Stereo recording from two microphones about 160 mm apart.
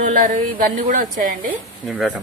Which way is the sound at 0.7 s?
50° right (ahead or behind).